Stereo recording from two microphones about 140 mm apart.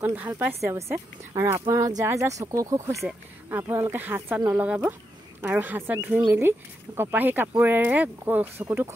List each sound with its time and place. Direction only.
0.0 s a woman's voice: 15° right (ahead or behind)